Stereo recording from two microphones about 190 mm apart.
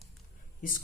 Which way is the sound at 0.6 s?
45° left (ahead or behind).